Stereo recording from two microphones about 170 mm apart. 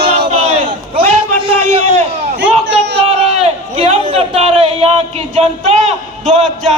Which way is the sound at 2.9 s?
35° right (ahead or behind).